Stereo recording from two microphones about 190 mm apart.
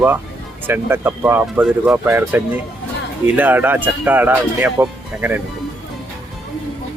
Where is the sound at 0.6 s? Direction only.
10° right (ahead or behind).